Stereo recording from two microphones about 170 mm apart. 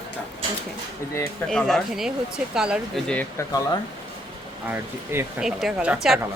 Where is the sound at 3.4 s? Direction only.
20° left (ahead or behind).